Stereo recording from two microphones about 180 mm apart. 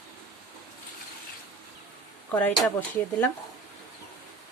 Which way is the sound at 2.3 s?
10° left (ahead or behind).